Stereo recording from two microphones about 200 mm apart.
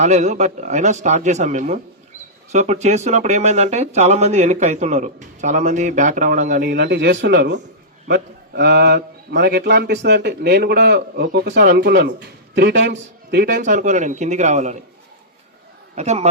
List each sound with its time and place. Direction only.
0.0 s speech: 35° right (ahead or behind)
6.7 s a man's voice: 55° right (ahead or behind)
13.6 s speech: 40° right (ahead or behind)
16.0 s speech: 35° right (ahead or behind)